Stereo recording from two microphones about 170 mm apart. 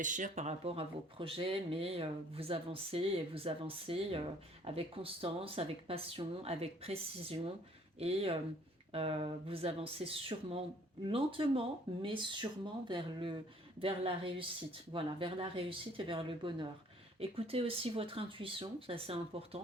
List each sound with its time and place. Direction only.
0.0 s speech: 50° right (ahead or behind)